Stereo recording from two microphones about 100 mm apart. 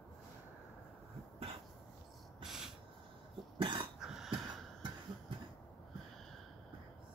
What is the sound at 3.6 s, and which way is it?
Cough, 55° right (ahead or behind).